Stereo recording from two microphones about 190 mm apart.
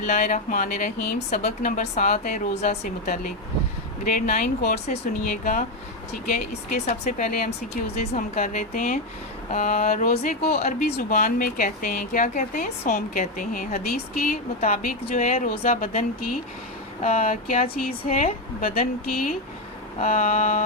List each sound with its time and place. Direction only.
0.0 s speech: 40° left (ahead or behind)
18.7 s speech: 50° left (ahead or behind)
20.0 s speech: 35° left (ahead or behind)